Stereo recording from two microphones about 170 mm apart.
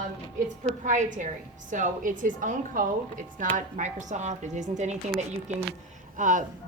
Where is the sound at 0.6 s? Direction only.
50° right (ahead or behind).